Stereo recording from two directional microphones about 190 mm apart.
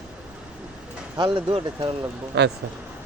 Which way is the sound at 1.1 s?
25° right (ahead or behind).